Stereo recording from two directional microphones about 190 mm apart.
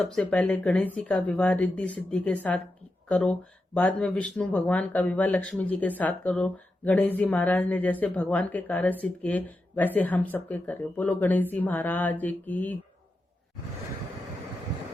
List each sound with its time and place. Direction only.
0.1 s speech: 5° left (ahead or behind)